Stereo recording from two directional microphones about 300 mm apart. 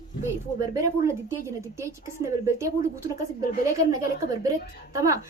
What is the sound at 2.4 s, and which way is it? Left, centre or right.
Speech, centre.